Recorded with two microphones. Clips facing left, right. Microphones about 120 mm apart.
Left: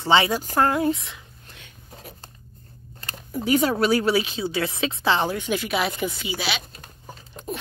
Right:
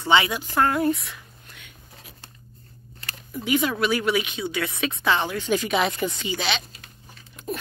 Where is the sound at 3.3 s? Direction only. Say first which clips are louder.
Left 3 dB; 40° left (ahead or behind).